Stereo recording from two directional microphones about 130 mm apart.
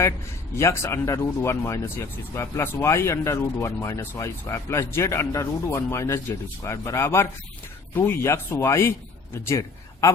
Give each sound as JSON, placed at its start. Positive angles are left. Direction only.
{"t": 0.5, "sound": "a man's voice", "side_deg": 20}